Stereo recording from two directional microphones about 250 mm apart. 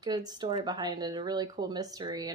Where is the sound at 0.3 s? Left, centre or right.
Centre.